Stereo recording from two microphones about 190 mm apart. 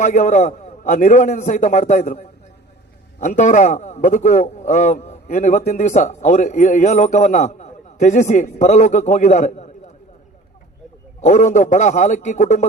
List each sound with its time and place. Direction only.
0.0 s a man's voice: 40° left (ahead or behind)
11.3 s a man's voice: 40° left (ahead or behind)